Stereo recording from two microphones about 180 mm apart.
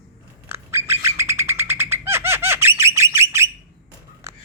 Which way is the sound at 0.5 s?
15° right (ahead or behind).